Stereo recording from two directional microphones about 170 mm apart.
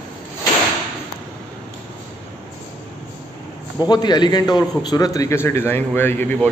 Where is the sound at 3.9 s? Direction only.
25° left (ahead or behind).